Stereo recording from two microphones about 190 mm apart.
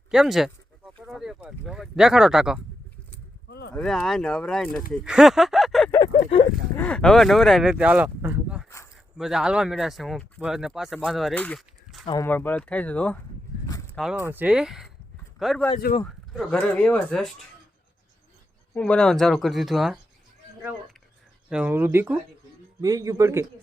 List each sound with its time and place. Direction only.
0.1 s speech: centre (ahead or behind)
3.7 s speech: 5° left (ahead or behind)
5.9 s a sound: 20° left (ahead or behind)
6.7 s speech: 5° left (ahead or behind)
12.0 s speech: 15° left (ahead or behind)
18.8 s speech: 5° left (ahead or behind)
21.5 s speech: 10° right (ahead or behind)